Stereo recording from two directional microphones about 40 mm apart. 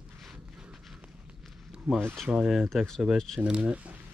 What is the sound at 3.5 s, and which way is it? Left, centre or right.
Speech, right.